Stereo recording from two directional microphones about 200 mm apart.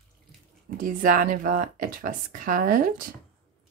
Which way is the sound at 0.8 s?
45° right (ahead or behind).